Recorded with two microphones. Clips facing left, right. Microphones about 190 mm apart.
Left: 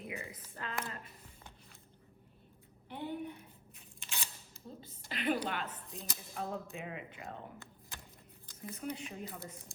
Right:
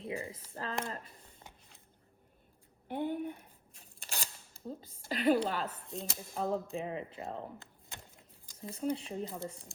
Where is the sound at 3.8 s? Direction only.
35° right (ahead or behind).